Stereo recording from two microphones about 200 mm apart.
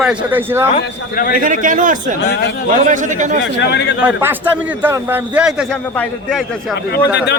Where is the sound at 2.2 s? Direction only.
55° left (ahead or behind).